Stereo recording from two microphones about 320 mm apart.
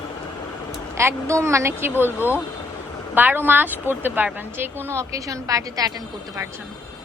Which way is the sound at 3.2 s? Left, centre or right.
Centre.